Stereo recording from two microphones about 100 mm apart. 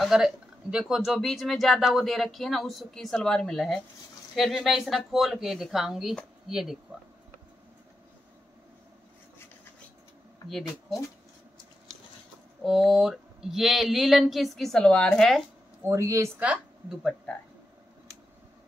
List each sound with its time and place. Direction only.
0.0 s speech: 5° right (ahead or behind)
12.6 s speech: centre (ahead or behind)
15.9 s speech: 30° right (ahead or behind)